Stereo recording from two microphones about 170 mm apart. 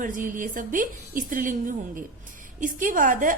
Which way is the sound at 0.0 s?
50° right (ahead or behind).